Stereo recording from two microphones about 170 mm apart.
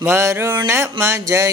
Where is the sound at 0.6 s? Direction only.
15° right (ahead or behind).